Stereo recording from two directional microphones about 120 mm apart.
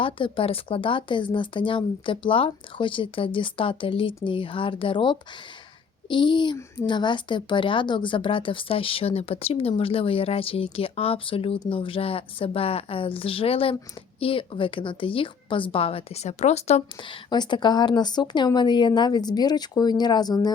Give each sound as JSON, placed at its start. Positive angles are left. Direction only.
{"t": 0.0, "sound": "speech", "side_deg": 50}
{"t": 17.0, "sound": "a woman's voice", "side_deg": 40}